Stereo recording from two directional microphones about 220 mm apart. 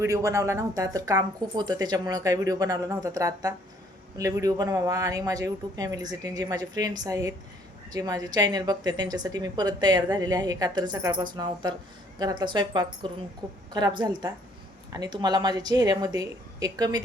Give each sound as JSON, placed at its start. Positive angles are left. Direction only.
{"t": 0.0, "sound": "a woman's voice", "side_deg": -15}